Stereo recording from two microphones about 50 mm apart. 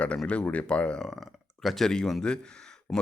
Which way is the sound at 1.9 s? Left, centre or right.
Centre.